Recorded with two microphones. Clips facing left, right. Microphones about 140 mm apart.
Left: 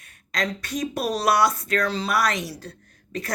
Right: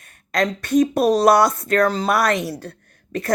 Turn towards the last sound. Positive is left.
turn(degrees=-55)  # may be behind; listen again after turning